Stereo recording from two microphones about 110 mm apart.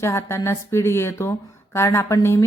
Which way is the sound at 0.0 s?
25° left (ahead or behind).